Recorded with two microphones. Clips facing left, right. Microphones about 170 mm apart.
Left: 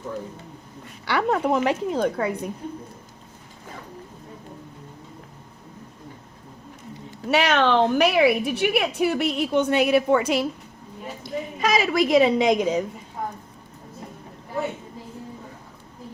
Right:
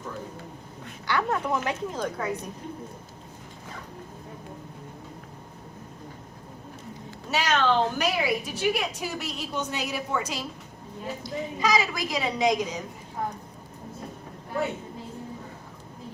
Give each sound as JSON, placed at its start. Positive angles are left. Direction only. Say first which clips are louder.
{"t": 1.0, "sound": "a woman's voice", "louder": "left 5 dB", "side_deg": 65}
{"t": 7.3, "sound": "a woman's voice", "louder": "left 5 dB", "side_deg": 65}